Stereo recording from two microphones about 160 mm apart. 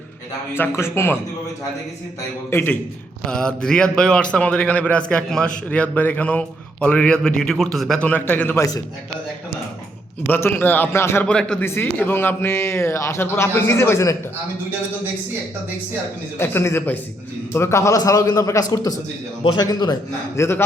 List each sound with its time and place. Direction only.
0.5 s a man's voice: 15° left (ahead or behind)
2.5 s a man's voice: 15° left (ahead or behind)
10.2 s a man's voice: 15° left (ahead or behind)
16.4 s a man's voice: 15° left (ahead or behind)